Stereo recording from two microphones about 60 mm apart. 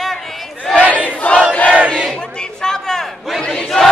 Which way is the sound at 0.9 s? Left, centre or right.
Left.